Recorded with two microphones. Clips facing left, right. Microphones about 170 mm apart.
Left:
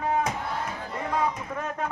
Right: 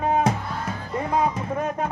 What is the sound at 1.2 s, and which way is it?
Speech, 20° right (ahead or behind).